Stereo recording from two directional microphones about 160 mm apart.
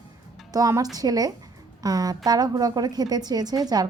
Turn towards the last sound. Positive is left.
turn(degrees=-25)  # may be behind; listen again after turning